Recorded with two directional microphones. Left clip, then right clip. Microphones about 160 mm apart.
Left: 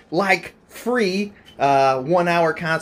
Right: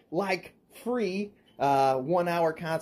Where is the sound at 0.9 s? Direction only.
5° right (ahead or behind).